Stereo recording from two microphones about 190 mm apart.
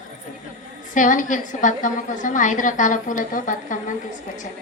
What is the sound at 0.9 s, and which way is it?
A woman's voice, 45° left (ahead or behind).